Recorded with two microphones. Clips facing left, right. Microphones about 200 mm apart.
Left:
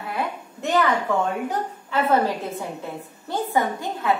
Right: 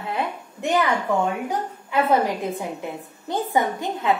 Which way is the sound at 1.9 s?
15° right (ahead or behind).